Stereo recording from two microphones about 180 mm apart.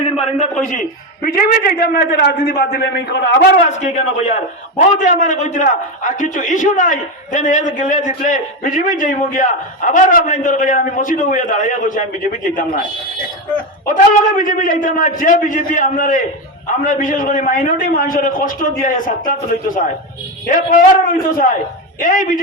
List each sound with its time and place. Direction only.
0.0 s a man's voice: 35° left (ahead or behind)
0.7 s a man's voice: 50° left (ahead or behind); by 3.5 s 65° left (ahead or behind)
3.6 s a man's voice: 45° left (ahead or behind)
13.8 s a man's voice: 50° left (ahead or behind)